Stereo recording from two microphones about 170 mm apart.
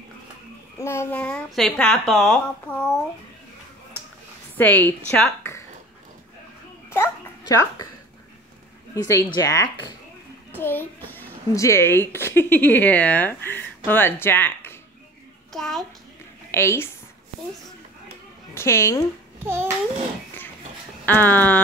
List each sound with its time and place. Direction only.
0.7 s a child's voice: 15° left (ahead or behind)
4.6 s a child's voice: 10° left (ahead or behind)
6.9 s a child's voice: 20° left (ahead or behind)
8.9 s a child's voice: 15° left (ahead or behind)
15.5 s a child's voice: centre (ahead or behind)
16.5 s a child's voice: 15° left (ahead or behind)
18.5 s a woman's voice: 15° left (ahead or behind)
19.4 s babbling: 15° right (ahead or behind)
21.0 s speech: 10° left (ahead or behind)